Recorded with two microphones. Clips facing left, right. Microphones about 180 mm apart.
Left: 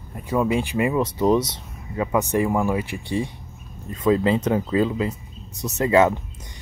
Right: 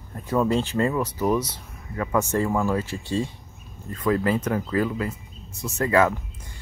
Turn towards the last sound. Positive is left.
turn(degrees=25)  # may be behind; listen again after turning